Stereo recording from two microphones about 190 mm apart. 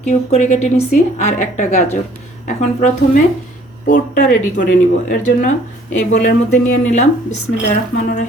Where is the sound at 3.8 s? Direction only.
45° left (ahead or behind).